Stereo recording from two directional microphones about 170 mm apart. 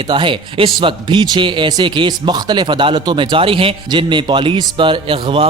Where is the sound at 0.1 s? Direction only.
30° right (ahead or behind).